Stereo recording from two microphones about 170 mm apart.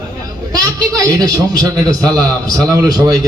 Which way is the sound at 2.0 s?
5° left (ahead or behind).